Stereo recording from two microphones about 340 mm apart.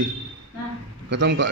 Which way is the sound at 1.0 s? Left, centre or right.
Right.